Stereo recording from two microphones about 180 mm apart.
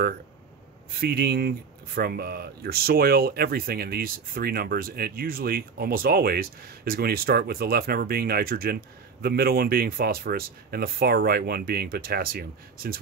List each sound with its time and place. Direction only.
1.0 s speech: 60° right (ahead or behind)